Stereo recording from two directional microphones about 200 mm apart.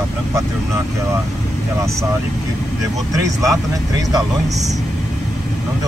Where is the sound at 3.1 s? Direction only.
15° right (ahead or behind).